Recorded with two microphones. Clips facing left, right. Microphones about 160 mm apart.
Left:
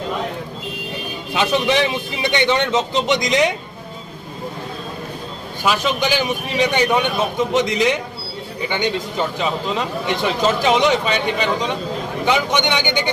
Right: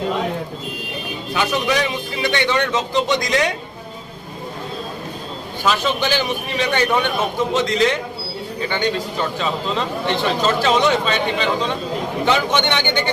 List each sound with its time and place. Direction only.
1.3 s a man's voice: 25° left (ahead or behind)
5.6 s speech: 10° left (ahead or behind)